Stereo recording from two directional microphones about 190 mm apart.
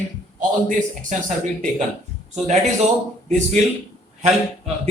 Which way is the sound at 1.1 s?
40° right (ahead or behind).